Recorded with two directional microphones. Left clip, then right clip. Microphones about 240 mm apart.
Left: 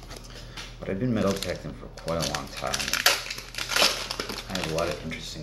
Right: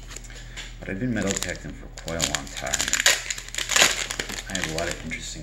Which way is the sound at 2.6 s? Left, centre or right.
Right.